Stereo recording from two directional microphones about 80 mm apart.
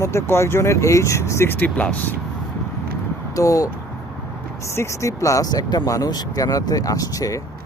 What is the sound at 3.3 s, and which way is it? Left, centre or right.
Speech, left.